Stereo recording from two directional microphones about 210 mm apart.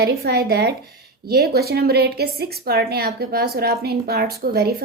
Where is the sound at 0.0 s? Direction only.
50° right (ahead or behind).